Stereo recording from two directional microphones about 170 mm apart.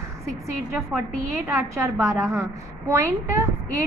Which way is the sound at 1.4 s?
15° right (ahead or behind).